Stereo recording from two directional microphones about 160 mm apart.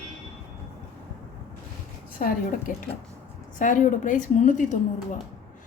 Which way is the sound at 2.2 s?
55° left (ahead or behind).